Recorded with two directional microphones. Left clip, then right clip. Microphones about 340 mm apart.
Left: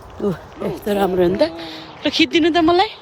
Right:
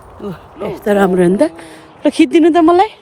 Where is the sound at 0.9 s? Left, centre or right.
Right.